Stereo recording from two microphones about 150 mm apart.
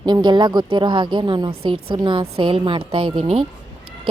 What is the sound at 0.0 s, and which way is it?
A woman's voice, 30° right (ahead or behind).